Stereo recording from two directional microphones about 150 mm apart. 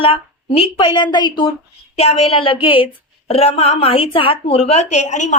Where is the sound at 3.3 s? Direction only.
45° left (ahead or behind).